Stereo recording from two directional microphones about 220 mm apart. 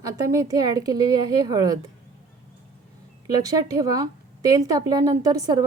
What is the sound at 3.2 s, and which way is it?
A woman's voice, 15° right (ahead or behind).